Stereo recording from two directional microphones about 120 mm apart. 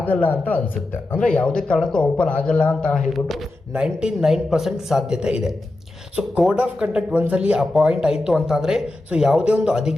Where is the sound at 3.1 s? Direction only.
5° right (ahead or behind).